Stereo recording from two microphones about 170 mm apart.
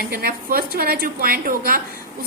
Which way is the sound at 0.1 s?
60° right (ahead or behind).